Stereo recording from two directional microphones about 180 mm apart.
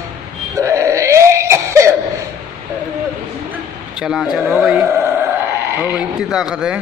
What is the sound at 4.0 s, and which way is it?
Speech, 5° right (ahead or behind).